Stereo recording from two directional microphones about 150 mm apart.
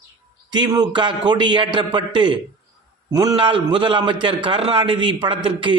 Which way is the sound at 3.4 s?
35° right (ahead or behind).